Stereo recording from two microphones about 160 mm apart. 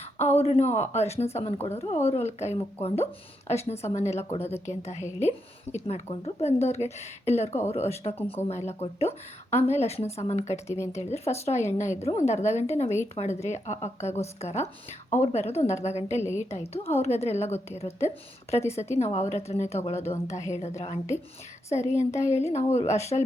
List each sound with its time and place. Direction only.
0.0 s a woman's voice: 40° left (ahead or behind)